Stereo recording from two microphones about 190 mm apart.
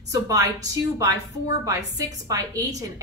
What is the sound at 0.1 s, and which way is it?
Speech, 20° right (ahead or behind).